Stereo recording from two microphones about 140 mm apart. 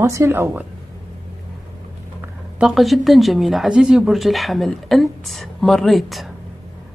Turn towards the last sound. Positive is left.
turn(degrees=0)  # may be behind; listen again after turning